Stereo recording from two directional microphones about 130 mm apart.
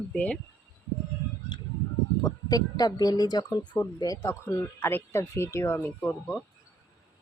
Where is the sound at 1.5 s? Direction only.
35° left (ahead or behind).